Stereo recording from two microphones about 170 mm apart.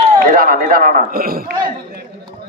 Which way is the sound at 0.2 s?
60° right (ahead or behind).